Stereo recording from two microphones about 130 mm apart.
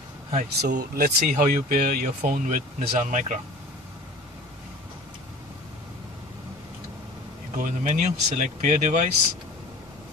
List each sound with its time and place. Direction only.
0.3 s speech: 75° right (ahead or behind)
7.5 s speech: 75° right (ahead or behind)